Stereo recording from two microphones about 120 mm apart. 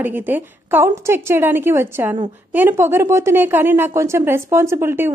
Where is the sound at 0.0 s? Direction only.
15° right (ahead or behind).